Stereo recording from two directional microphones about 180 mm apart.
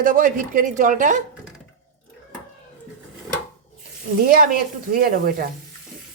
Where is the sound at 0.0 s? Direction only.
50° right (ahead or behind).